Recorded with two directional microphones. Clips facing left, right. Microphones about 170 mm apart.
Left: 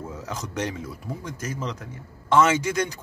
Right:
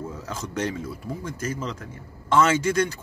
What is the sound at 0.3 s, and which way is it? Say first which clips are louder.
A man's voice: right 1 dB; 15° left (ahead or behind).